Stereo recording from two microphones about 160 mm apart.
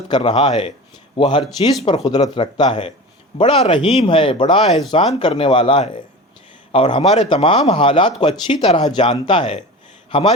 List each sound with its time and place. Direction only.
0.1 s a man's voice: 30° left (ahead or behind)